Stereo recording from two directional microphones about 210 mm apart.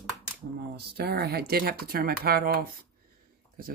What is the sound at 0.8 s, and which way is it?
Speech, 50° right (ahead or behind).